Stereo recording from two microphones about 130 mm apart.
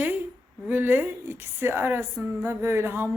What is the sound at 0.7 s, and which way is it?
Speech, 15° right (ahead or behind).